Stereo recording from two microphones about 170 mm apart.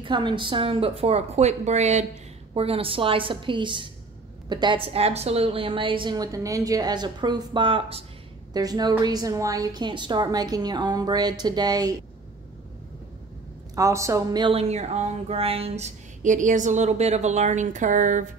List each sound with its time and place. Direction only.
0.0 s a woman's voice: 25° right (ahead or behind)
13.7 s speech: 20° right (ahead or behind); by 18.3 s 50° right (ahead or behind)